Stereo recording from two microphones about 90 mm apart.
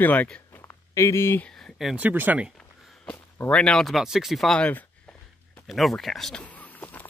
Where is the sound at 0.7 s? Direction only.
35° left (ahead or behind).